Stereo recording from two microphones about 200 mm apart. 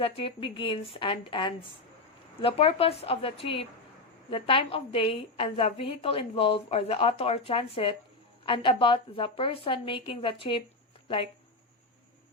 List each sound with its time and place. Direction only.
0.0 s a woman's voice: 25° left (ahead or behind)